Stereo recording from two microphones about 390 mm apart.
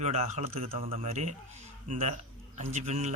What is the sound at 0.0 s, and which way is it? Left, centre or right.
Speech, centre.